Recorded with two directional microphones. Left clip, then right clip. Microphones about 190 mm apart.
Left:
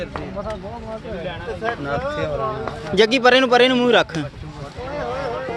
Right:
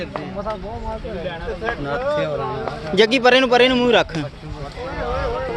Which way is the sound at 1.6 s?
60° left (ahead or behind).